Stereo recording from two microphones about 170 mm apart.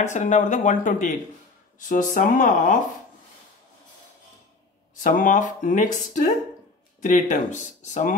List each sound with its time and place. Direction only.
0.0 s speech: 45° left (ahead or behind)
4.9 s speech: 50° left (ahead or behind)
7.0 s speech: 50° left (ahead or behind)